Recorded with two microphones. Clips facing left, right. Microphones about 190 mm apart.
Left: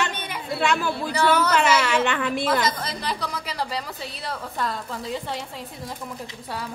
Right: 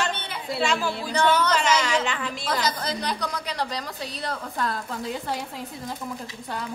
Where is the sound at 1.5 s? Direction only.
60° left (ahead or behind).